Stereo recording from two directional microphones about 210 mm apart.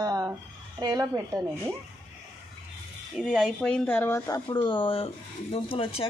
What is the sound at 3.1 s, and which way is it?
Speech, centre (ahead or behind).